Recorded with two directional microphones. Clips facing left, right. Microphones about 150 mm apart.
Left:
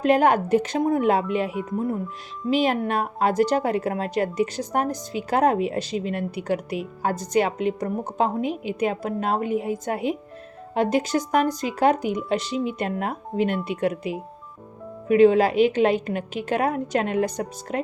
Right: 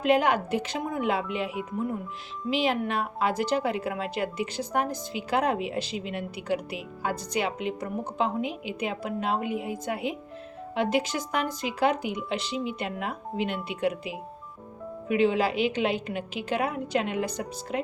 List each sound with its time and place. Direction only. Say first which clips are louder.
0.0 s a woman's voice: left 4 dB; 45° left (ahead or behind)
2.5 s a woman's voice: left 5 dB; 45° left (ahead or behind)